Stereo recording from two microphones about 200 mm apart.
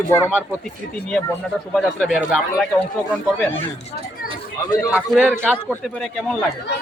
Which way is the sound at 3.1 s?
10° left (ahead or behind).